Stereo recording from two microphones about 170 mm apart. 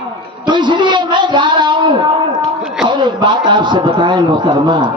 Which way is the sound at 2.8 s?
25° right (ahead or behind).